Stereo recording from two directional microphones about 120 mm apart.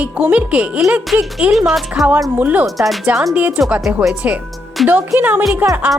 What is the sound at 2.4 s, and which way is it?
Speech, 15° right (ahead or behind).